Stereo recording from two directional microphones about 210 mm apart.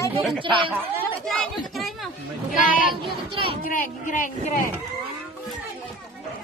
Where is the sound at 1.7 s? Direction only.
Centre (ahead or behind).